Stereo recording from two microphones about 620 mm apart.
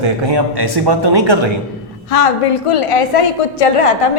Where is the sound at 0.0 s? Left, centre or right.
Right.